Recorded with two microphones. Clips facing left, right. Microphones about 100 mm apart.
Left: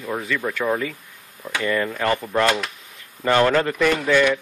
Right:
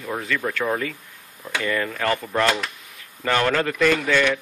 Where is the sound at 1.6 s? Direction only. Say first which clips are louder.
Left 2 dB; 15° left (ahead or behind).